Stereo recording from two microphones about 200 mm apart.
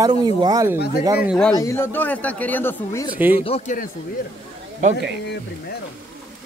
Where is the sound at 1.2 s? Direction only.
Centre (ahead or behind).